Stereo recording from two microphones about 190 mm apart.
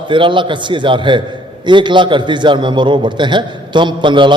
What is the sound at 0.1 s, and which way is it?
A man's voice, 25° right (ahead or behind).